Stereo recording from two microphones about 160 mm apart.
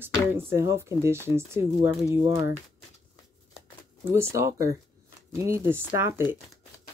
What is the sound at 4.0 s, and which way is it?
Speech, 15° right (ahead or behind).